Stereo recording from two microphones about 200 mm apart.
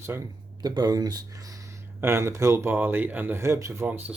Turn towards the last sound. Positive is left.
turn(degrees=-10)  # may be behind; listen again after turning